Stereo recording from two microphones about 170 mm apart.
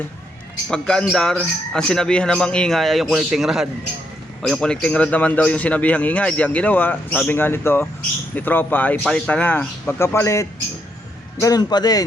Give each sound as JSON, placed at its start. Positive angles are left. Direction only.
{"t": 0.7, "sound": "a man's voice", "side_deg": 5}